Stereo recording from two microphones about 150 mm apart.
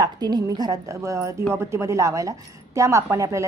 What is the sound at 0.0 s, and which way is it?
A woman's voice, 30° right (ahead or behind).